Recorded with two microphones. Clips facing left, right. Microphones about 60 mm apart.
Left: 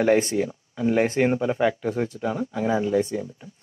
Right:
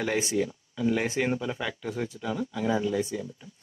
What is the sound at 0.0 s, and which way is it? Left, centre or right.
Speech, left.